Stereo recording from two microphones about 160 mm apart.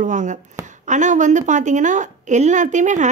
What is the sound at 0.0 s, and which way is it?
Chopping, 50° right (ahead or behind).